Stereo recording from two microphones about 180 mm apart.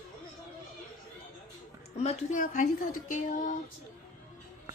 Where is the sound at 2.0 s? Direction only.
40° left (ahead or behind).